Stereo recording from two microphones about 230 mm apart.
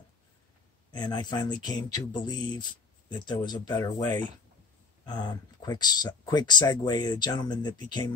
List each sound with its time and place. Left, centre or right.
0.9 s speech: centre